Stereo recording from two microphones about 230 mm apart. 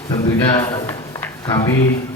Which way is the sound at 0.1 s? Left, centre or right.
Centre.